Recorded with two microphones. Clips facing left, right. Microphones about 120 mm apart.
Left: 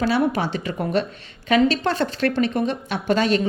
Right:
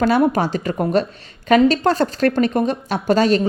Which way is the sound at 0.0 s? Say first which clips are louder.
Right 4 dB; 45° right (ahead or behind).